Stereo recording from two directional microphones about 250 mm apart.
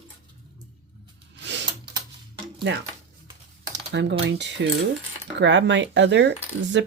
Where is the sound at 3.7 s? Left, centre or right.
Right.